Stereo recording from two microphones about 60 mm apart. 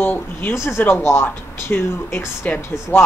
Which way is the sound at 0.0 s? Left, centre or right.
Left.